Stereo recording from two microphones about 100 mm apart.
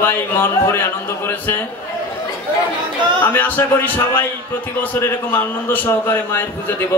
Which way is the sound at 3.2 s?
20° left (ahead or behind).